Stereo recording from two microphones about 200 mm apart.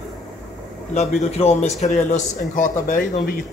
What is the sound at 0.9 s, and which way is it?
A man's voice, 35° left (ahead or behind).